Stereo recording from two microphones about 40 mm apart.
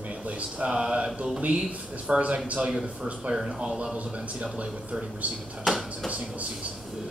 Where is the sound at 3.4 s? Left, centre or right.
Centre.